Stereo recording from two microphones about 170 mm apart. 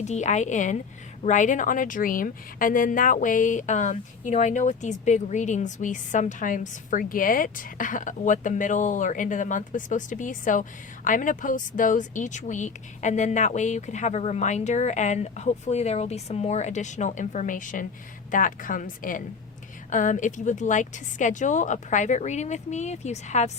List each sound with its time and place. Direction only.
0.0 s a woman's voice: 45° left (ahead or behind)